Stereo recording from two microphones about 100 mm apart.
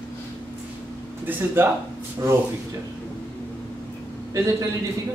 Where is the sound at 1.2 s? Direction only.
20° right (ahead or behind).